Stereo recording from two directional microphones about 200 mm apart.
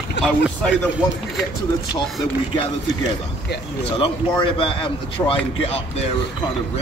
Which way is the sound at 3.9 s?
25° left (ahead or behind).